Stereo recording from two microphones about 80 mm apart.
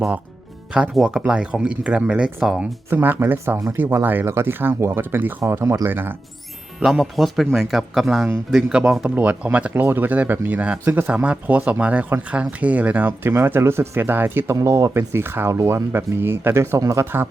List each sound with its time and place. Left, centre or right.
0.9 s speech: centre
2.9 s speech: right
3.8 s speech: right
6.7 s speech: centre
9.0 s speech: centre
14.5 s speech: right
16.8 s speech: right